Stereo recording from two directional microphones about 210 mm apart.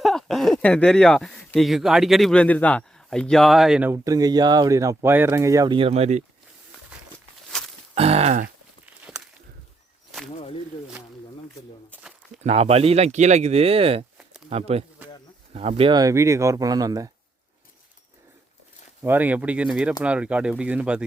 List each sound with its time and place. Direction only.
0.0 s speech: centre (ahead or behind); by 6.2 s 30° right (ahead or behind)
7.9 s speech: 30° right (ahead or behind)
9.1 s walk: centre (ahead or behind)
11.9 s a sound: centre (ahead or behind)
12.4 s speech: 30° right (ahead or behind)
19.0 s speech: 10° right (ahead or behind)